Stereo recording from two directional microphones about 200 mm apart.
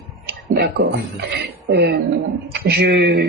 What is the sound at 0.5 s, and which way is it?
Speech, 55° right (ahead or behind).